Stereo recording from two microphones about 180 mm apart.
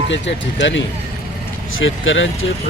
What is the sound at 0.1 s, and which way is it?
Speech, 90° left.